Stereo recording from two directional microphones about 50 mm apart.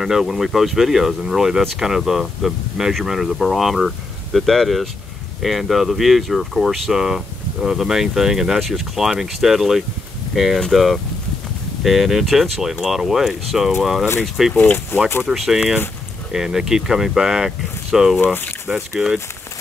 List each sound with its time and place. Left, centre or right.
0.0 s speech: centre
14.5 s speech: left
15.2 s speech: centre
18.2 s speech: left
18.7 s speech: centre